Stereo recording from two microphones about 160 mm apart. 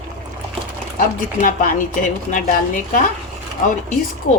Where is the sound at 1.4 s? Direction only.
60° left (ahead or behind).